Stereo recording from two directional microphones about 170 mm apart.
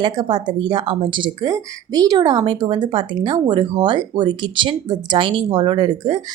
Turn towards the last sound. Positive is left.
turn(degrees=-25)  # may be behind; listen again after turning